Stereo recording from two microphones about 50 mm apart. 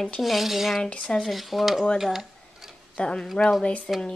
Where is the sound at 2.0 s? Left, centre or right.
Centre.